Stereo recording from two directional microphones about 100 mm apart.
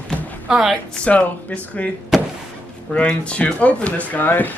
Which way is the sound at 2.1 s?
Centre (ahead or behind).